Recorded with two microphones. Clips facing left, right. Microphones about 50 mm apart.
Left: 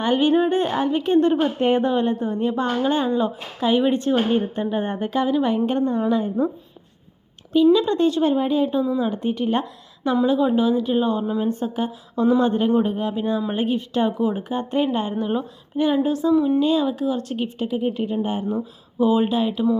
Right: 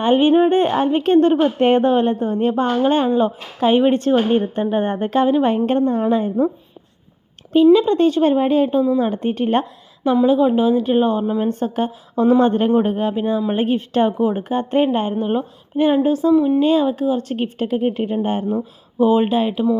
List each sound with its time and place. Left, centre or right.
0.0 s a woman's voice: right
1.5 s a woman's voice: right
2.6 s a woman's voice: right
7.5 s a woman's voice: right
10.0 s a woman's voice: right
11.4 s speech: right
12.1 s speech: right
13.1 s a woman's voice: right
16.3 s speech: centre
16.6 s a woman's voice: right
18.4 s a woman's voice: right